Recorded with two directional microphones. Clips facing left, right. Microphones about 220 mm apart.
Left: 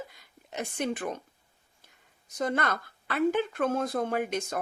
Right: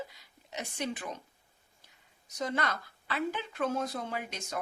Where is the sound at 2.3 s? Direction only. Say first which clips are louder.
Left 4 dB; 50° left (ahead or behind).